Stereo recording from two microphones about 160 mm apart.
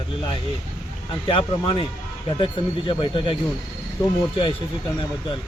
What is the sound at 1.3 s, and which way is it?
Speech, 35° left (ahead or behind).